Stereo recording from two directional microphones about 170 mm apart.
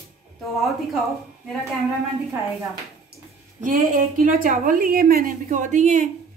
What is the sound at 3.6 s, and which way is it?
A woman's voice, 50° right (ahead or behind).